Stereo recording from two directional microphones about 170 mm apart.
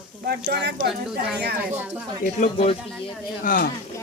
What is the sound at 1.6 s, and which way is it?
Speech, 10° right (ahead or behind).